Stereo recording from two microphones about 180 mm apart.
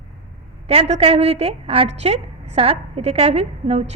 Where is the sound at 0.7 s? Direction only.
35° right (ahead or behind).